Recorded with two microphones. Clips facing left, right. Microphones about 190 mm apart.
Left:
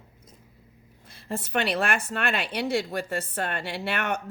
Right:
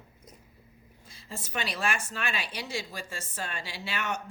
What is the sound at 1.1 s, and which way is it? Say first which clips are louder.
A woman's voice: left 9 dB; 60° left (ahead or behind).